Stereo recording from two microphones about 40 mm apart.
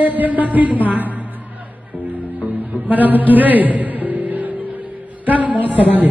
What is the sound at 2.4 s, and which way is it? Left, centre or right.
Music, right.